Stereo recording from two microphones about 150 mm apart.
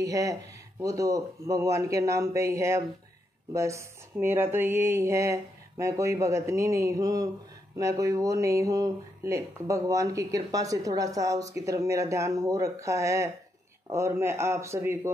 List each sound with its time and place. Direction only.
0.0 s speech: 20° right (ahead or behind)